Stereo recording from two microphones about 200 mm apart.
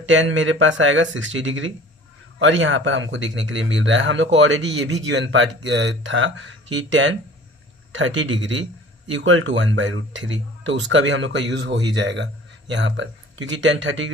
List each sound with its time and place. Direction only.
0.0 s speech: 70° right (ahead or behind)